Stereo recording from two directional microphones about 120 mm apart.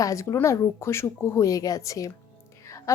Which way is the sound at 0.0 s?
25° left (ahead or behind).